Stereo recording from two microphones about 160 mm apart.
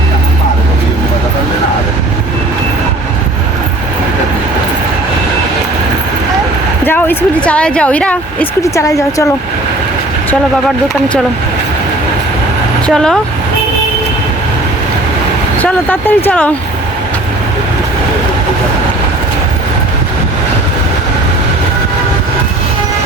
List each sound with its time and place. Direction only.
6.8 s speech: 15° left (ahead or behind)
8.6 s speech: 20° left (ahead or behind)
12.9 s speech: 5° left (ahead or behind)
15.5 s speech: 10° left (ahead or behind)